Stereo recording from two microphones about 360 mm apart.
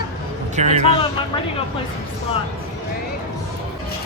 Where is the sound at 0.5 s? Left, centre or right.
Centre.